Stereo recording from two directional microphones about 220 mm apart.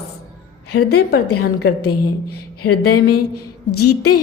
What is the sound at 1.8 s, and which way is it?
Speech, 90° left.